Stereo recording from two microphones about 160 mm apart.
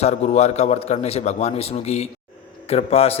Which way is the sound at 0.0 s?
45° left (ahead or behind).